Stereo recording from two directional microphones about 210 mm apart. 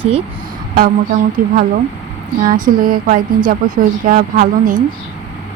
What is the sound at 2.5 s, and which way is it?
A woman's voice, 40° right (ahead or behind).